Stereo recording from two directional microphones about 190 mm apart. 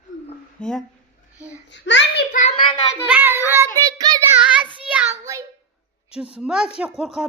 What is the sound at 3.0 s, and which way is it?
Child singing, 10° right (ahead or behind).